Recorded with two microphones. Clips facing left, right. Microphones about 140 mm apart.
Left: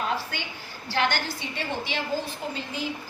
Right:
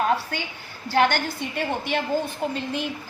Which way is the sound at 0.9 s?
50° right (ahead or behind).